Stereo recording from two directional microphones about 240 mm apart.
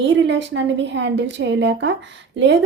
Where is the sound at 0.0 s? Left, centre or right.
Right.